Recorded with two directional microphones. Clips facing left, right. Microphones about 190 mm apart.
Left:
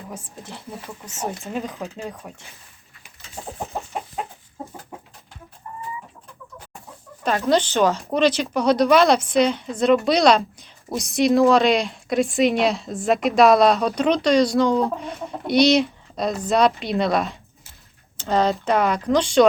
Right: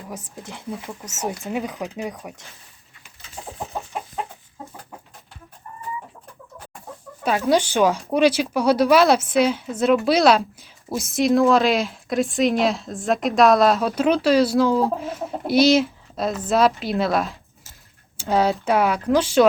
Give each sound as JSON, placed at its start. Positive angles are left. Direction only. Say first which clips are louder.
{"t": 0.1, "sound": "speech", "louder": "right 1 dB", "side_deg": -15}
{"t": 7.3, "sound": "speech", "louder": "even", "side_deg": -10}